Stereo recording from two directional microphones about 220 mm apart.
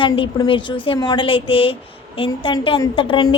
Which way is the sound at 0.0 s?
25° left (ahead or behind).